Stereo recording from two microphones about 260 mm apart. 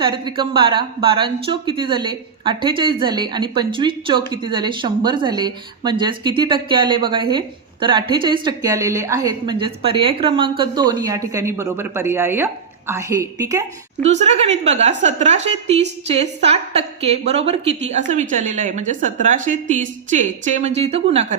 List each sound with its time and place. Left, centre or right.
0.0 s a woman's voice: centre
14.0 s a woman's voice: right